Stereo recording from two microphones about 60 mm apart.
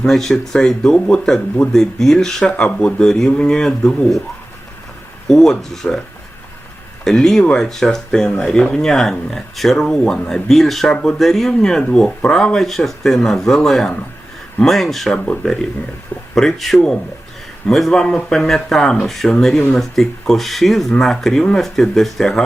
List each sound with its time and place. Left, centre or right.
0.0 s speech: centre
5.3 s speech: centre
7.0 s speech: centre
10.9 s speech: centre
11.2 s speech: centre
15.1 s speech: centre